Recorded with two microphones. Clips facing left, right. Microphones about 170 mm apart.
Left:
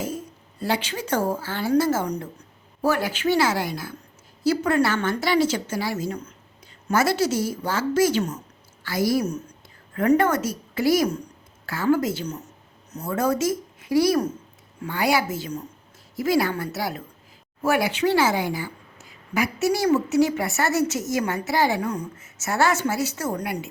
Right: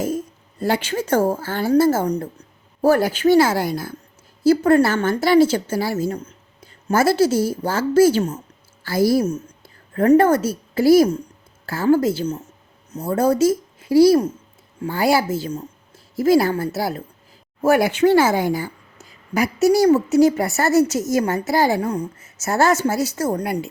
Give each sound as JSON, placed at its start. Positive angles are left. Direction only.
{"t": 0.6, "sound": "a woman's voice", "side_deg": -50}
{"t": 17.6, "sound": "a woman's voice", "side_deg": -45}